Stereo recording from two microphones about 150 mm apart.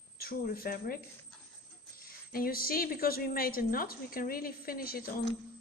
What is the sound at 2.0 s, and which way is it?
A woman's voice, 80° left.